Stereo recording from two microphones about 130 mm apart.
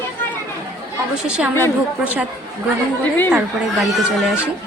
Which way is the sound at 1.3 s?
5° right (ahead or behind).